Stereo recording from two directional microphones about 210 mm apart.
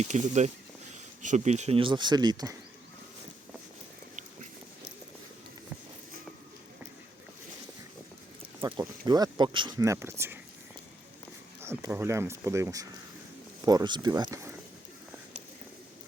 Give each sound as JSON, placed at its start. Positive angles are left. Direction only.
{"t": 0.0, "sound": "speech", "side_deg": -35}
{"t": 8.8, "sound": "speech", "side_deg": -20}
{"t": 11.6, "sound": "speech", "side_deg": -15}